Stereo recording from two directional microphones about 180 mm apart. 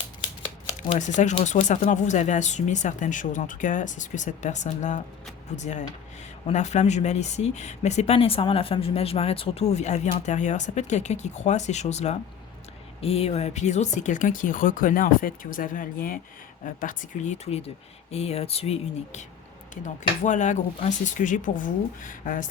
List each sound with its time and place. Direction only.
0.9 s speech: 40° left (ahead or behind)